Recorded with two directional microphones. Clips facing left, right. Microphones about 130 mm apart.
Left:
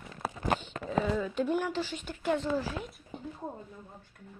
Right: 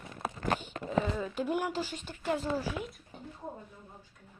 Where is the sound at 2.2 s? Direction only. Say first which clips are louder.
Left 2 dB; 5° right (ahead or behind).